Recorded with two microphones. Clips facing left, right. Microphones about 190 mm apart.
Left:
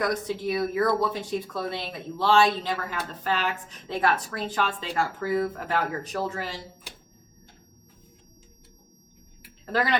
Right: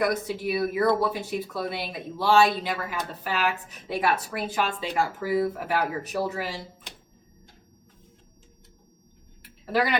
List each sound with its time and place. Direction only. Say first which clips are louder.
0.0 s speech: right 1 dB; 10° right (ahead or behind)
9.7 s speech: right 1 dB; 10° right (ahead or behind)